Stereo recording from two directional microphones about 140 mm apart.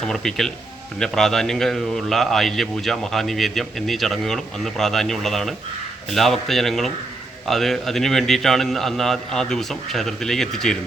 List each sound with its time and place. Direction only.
0.0 s a man's voice: 5° left (ahead or behind)